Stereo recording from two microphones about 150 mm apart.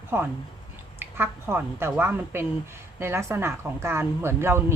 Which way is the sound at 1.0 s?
15° right (ahead or behind).